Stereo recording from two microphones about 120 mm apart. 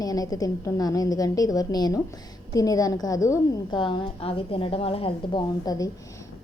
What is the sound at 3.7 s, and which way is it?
A woman's voice, 45° left (ahead or behind).